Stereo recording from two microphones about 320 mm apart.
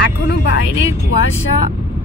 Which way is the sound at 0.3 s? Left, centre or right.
Left.